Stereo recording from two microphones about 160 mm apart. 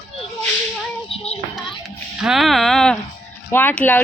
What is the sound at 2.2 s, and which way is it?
A woman's voice, centre (ahead or behind).